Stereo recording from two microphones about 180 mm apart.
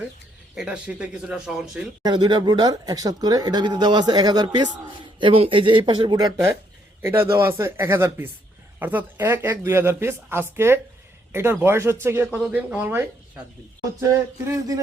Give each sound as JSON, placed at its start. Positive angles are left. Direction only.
{"t": 0.5, "sound": "speech", "side_deg": -5}
{"t": 2.0, "sound": "speech", "side_deg": -25}
{"t": 14.1, "sound": "speech", "side_deg": -15}